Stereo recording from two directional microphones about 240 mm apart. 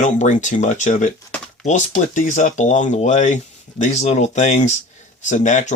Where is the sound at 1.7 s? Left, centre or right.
Left.